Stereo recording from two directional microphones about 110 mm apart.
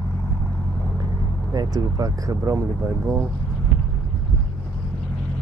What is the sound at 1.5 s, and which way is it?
Speech, 35° right (ahead or behind).